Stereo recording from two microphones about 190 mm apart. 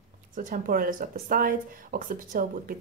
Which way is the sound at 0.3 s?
45° right (ahead or behind).